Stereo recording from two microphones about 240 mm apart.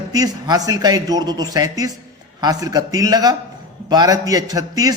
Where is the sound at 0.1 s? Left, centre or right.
Centre.